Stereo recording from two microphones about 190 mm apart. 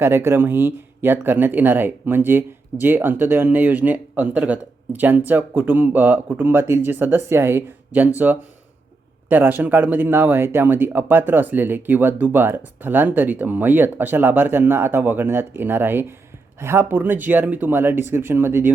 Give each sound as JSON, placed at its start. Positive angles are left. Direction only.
{"t": 0.0, "sound": "speech", "side_deg": -10}